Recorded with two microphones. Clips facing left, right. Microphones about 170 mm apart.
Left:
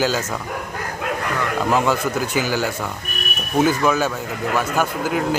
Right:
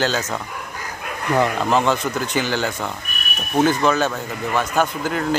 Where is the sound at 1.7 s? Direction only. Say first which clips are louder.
Even; 10° left (ahead or behind).